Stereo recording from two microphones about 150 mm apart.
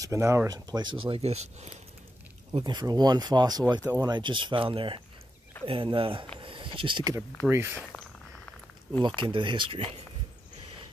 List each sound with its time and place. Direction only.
0.0 s speech: 20° right (ahead or behind)
1.1 s speech: 45° right (ahead or behind)
2.5 s speech: 30° right (ahead or behind)
6.4 s a sound: 35° right (ahead or behind)
7.4 s speech: 15° right (ahead or behind)
9.0 s speech: 35° right (ahead or behind)